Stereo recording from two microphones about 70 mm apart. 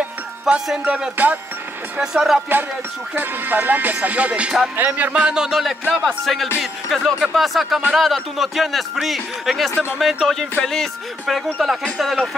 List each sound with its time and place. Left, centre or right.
0.5 s a man's voice: centre
0.8 s music: centre
2.0 s speech: centre
3.2 s music: right
5.1 s a man's voice: centre